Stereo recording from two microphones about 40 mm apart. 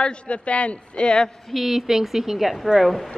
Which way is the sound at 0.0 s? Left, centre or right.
Left.